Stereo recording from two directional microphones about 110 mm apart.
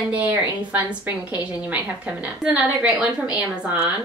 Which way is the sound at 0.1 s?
15° right (ahead or behind).